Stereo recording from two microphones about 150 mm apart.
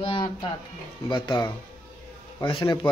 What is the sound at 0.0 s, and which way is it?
Music, 35° left (ahead or behind).